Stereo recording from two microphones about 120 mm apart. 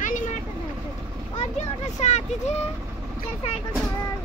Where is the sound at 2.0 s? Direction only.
70° left (ahead or behind).